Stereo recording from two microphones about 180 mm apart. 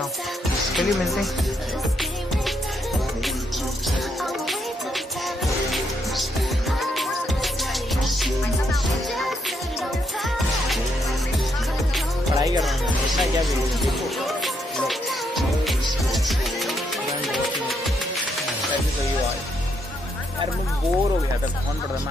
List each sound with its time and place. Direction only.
0.7 s speech: centre (ahead or behind)
12.4 s music: 20° right (ahead or behind)
13.8 s music: centre (ahead or behind)